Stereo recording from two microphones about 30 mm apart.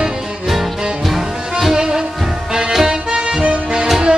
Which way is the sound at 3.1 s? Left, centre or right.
Right.